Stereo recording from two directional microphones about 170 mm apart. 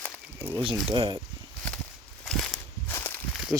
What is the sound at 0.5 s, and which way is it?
Speech, 30° right (ahead or behind).